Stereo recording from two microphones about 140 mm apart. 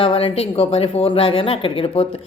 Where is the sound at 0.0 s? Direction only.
40° left (ahead or behind).